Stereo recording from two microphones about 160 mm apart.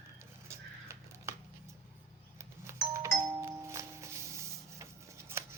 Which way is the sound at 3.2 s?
20° right (ahead or behind).